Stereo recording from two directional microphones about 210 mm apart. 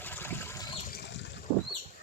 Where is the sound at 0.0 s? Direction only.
10° left (ahead or behind).